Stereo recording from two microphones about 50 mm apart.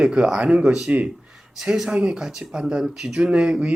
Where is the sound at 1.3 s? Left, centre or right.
Centre.